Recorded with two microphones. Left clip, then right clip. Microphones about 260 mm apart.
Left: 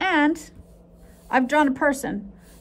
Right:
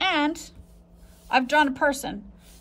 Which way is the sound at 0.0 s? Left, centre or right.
Centre.